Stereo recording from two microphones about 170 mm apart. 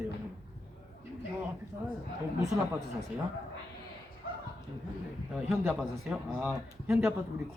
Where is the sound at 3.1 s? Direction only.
5° right (ahead or behind).